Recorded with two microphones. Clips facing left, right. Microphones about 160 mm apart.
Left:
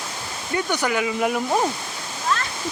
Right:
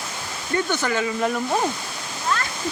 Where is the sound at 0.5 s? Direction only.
15° left (ahead or behind).